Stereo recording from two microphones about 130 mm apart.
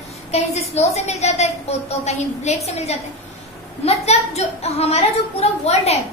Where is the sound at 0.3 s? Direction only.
55° left (ahead or behind).